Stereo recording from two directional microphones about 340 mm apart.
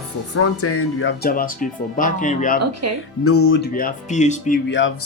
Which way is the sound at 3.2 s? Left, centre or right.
Left.